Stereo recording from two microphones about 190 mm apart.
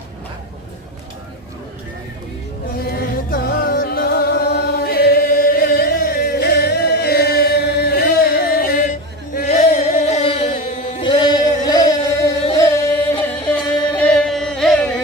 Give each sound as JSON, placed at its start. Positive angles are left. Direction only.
{"t": 2.7, "sound": "music", "side_deg": 50}
{"t": 11.6, "sound": "a sound", "side_deg": 20}
{"t": 13.5, "sound": "music", "side_deg": 5}